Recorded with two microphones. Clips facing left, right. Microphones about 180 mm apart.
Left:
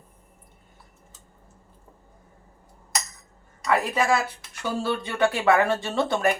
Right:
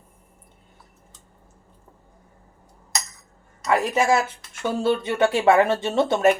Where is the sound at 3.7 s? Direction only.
25° right (ahead or behind).